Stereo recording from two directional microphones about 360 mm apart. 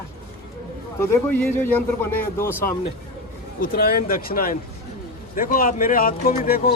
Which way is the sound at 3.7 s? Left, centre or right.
Left.